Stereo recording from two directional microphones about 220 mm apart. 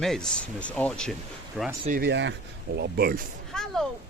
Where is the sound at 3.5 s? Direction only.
Centre (ahead or behind).